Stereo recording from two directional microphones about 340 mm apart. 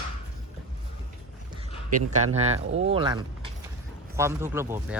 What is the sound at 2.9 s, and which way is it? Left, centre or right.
Speech, centre.